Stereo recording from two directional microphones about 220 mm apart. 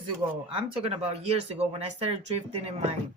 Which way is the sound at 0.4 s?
25° right (ahead or behind).